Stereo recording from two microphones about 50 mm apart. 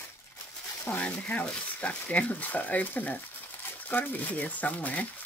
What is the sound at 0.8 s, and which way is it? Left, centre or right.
Speech, left.